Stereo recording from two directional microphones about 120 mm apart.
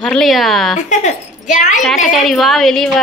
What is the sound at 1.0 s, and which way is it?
Speech, 85° left.